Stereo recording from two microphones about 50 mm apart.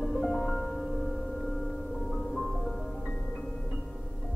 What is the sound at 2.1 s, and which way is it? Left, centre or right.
Music, centre.